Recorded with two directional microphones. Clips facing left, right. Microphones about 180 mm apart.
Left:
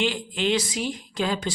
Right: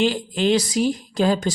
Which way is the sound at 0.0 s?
40° right (ahead or behind).